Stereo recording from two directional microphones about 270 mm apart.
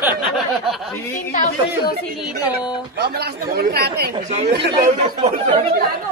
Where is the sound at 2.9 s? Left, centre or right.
Right.